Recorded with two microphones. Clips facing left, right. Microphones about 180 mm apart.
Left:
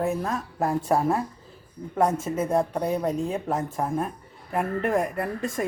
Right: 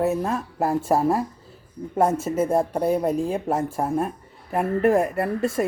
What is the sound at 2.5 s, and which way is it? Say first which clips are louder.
Speech: right 2 dB; 25° right (ahead or behind).